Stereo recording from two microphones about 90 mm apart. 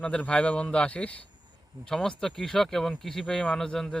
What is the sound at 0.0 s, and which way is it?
A man's voice, 15° left (ahead or behind).